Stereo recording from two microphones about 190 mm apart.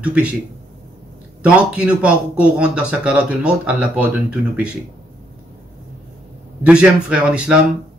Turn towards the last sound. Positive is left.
turn(degrees=-5)  # may be behind; listen again after turning